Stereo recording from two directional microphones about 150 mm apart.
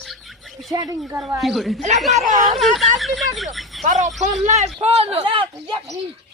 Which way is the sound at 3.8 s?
55° right (ahead or behind).